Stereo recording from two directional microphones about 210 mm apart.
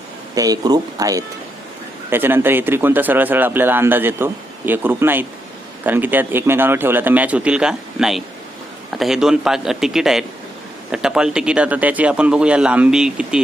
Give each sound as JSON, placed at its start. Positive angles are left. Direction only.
{"t": 0.3, "sound": "speech", "side_deg": -15}